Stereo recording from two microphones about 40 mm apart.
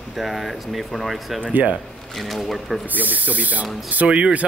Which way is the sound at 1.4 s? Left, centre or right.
Right.